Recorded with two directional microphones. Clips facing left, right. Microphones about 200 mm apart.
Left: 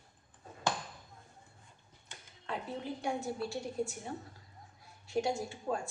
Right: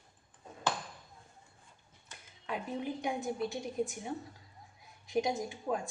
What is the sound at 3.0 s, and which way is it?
A woman's voice, 15° right (ahead or behind).